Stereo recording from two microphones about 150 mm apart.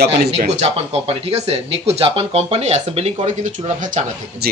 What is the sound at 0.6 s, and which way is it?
Speech, 40° right (ahead or behind).